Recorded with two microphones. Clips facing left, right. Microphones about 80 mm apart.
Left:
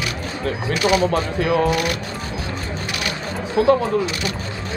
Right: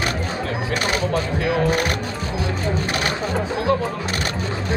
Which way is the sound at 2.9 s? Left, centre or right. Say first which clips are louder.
Right 3 dB; right.